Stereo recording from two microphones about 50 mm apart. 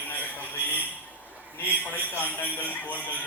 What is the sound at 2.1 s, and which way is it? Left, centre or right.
Speech, left.